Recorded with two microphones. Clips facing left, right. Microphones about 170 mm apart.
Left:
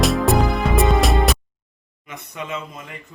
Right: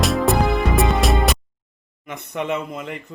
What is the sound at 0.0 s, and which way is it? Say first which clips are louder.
Music: left 1 dB; centre (ahead or behind).